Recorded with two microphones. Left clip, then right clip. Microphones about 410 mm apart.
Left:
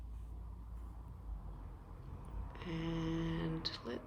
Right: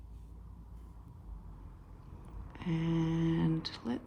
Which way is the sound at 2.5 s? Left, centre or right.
Centre.